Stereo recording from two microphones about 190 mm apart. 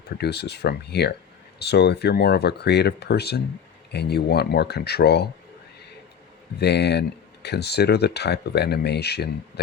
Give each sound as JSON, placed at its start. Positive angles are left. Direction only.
{"t": 0.2, "sound": "speech", "side_deg": 60}
{"t": 6.6, "sound": "speech", "side_deg": 60}